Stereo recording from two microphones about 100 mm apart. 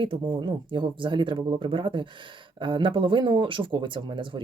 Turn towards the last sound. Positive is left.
turn(degrees=-55)  # may be behind; listen again after turning